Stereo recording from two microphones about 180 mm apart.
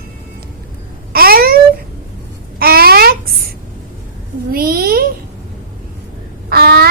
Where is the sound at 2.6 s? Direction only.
60° right (ahead or behind).